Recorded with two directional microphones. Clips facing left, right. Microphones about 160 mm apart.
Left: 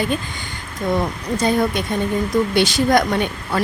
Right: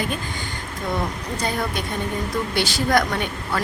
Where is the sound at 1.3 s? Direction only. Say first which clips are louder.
Left 9 dB; 20° left (ahead or behind).